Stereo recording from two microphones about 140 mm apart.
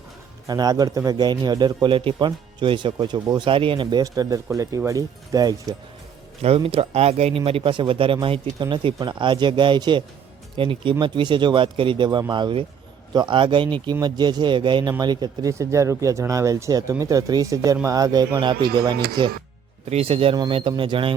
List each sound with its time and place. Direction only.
0.4 s speech: 30° right (ahead or behind)
6.4 s speech: 45° right (ahead or behind)
19.9 s speech: 45° right (ahead or behind)